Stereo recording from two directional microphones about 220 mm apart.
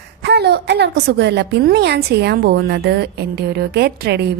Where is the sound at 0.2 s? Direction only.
50° right (ahead or behind).